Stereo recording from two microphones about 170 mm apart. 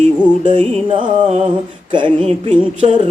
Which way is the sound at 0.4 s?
30° right (ahead or behind).